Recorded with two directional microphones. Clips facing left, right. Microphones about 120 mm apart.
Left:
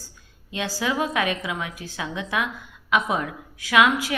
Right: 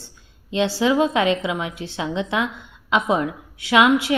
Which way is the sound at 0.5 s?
25° right (ahead or behind).